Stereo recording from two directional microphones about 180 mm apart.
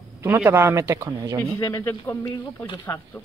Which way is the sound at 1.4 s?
15° left (ahead or behind).